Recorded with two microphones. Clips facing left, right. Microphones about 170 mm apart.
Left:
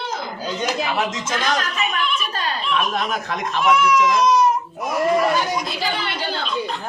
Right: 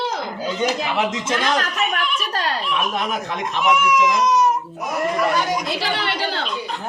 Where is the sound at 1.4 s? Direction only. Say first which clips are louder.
Even; 70° right (ahead or behind).